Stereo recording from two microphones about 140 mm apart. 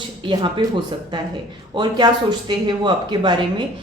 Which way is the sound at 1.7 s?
30° right (ahead or behind).